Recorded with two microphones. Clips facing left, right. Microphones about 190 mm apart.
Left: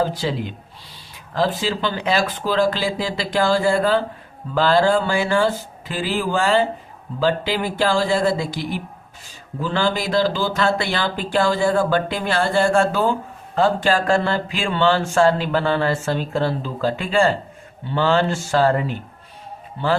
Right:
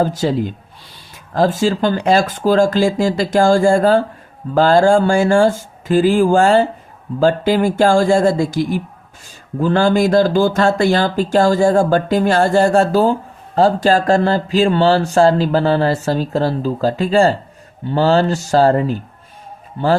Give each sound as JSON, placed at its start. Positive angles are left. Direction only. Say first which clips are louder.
{"t": 0.0, "sound": "speech", "louder": "right 5 dB", "side_deg": -45}